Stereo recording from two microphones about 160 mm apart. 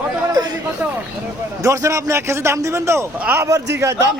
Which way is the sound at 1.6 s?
20° right (ahead or behind).